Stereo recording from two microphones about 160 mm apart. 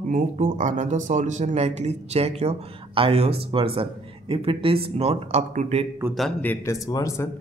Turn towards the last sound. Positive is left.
turn(degrees=20)  # may be behind; listen again after turning